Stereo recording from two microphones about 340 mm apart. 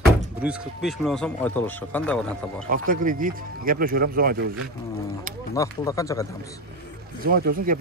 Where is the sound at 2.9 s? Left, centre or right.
Right.